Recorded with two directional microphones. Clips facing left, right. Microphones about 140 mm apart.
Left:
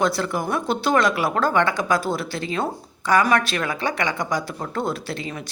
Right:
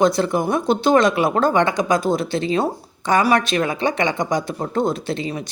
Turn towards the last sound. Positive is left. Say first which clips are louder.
# right 5 dB
turn(degrees=-20)  # may be behind; listen again after turning